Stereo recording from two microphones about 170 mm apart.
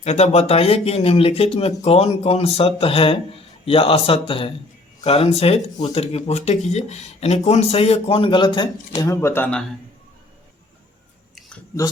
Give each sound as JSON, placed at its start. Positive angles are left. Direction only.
{"t": 0.0, "sound": "speech", "side_deg": 40}
{"t": 9.0, "sound": "speech", "side_deg": 15}